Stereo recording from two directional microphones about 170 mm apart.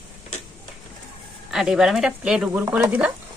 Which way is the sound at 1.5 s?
Centre (ahead or behind).